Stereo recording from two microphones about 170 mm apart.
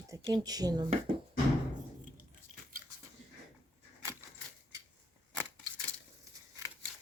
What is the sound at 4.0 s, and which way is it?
Keys jangling, 15° right (ahead or behind).